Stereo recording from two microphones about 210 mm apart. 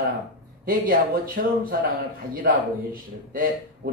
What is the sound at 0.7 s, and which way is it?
A man's voice, 40° right (ahead or behind).